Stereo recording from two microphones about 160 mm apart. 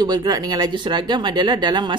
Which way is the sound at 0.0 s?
25° right (ahead or behind).